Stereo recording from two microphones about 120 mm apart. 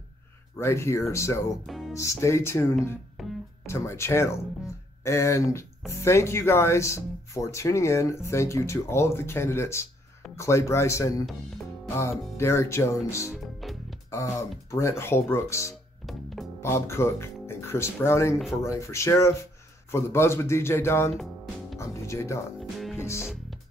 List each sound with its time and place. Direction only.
0.6 s speech: 20° left (ahead or behind)
1.7 s music: centre (ahead or behind)
2.0 s speech: 25° left (ahead or behind)
3.2 s music: centre (ahead or behind)
3.6 s speech: 20° left (ahead or behind)
13.3 s music: centre (ahead or behind)
14.7 s speech: 25° left (ahead or behind)
16.1 s music: centre (ahead or behind)
16.6 s speech: 20° left (ahead or behind)
21.1 s music: centre (ahead or behind)
21.7 s music: 25° left (ahead or behind)
22.6 s music: centre (ahead or behind)
22.9 s music: 20° left (ahead or behind)